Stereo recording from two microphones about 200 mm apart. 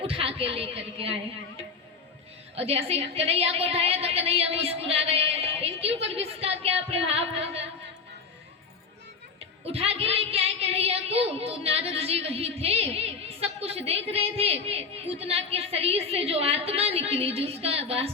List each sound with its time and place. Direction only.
0.1 s a woman's voice: 30° right (ahead or behind)
2.6 s a woman's voice: 30° right (ahead or behind)
9.6 s a woman's voice: 30° right (ahead or behind)